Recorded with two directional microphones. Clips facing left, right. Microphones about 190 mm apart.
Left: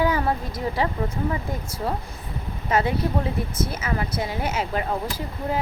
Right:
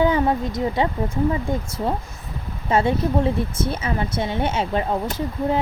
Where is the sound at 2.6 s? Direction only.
25° right (ahead or behind).